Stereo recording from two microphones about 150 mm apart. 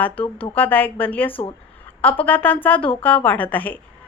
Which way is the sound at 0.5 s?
10° left (ahead or behind).